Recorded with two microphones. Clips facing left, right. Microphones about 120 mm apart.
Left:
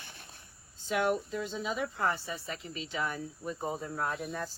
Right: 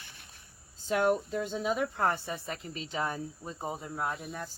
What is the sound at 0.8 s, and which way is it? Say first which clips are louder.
Speech: right 2 dB; 40° right (ahead or behind).